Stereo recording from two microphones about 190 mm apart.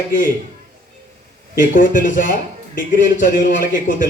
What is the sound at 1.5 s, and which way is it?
A man's voice, 45° left (ahead or behind).